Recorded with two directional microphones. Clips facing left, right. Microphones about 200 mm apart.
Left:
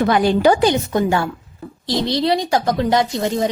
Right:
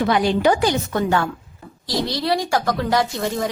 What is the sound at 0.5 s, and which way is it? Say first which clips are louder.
Speech: left 4 dB; 25° left (ahead or behind).